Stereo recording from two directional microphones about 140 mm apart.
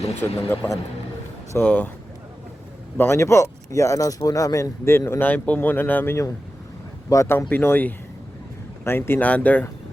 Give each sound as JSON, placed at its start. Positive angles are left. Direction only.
{"t": 0.0, "sound": "speech", "side_deg": 20}
{"t": 3.0, "sound": "speech", "side_deg": 20}